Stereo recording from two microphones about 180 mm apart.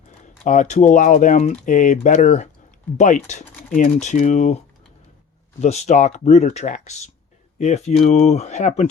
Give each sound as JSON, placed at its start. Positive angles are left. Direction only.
{"t": 0.4, "sound": "speech", "side_deg": 45}